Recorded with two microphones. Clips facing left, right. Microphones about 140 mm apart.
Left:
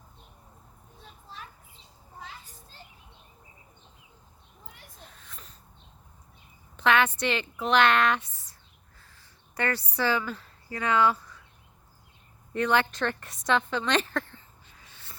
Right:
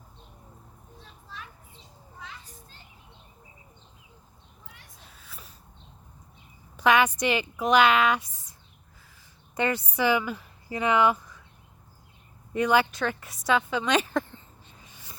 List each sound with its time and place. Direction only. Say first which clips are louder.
5.0 s a sound: right 2 dB; 5° right (ahead or behind)
6.7 s a woman's voice: right 2 dB; 10° right (ahead or behind)
9.6 s speech: right 3 dB; 20° right (ahead or behind)
12.5 s a woman's voice: right 2 dB; 10° right (ahead or behind)